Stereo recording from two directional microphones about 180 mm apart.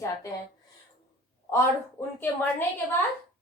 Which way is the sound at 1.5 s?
15° left (ahead or behind).